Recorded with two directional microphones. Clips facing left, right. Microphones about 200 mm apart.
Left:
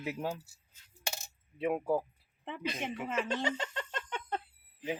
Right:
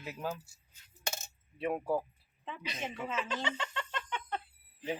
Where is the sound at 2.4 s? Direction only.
55° left (ahead or behind).